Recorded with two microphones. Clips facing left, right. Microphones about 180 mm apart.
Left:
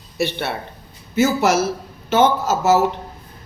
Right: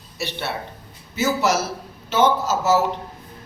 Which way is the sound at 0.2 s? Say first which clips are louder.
Left 5 dB; 55° left (ahead or behind).